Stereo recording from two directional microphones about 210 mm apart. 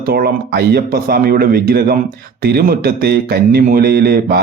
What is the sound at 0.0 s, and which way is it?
Speech, 45° right (ahead or behind).